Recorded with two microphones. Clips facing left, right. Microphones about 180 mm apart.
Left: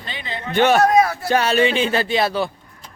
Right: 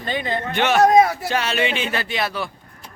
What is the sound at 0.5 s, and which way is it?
Speech, 45° left (ahead or behind).